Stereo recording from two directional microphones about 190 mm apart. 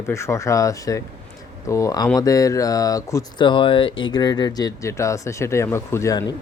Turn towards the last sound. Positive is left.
turn(degrees=20)  # may be behind; listen again after turning